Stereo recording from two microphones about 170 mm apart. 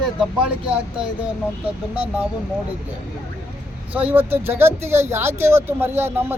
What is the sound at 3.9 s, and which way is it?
Speech, 10° right (ahead or behind).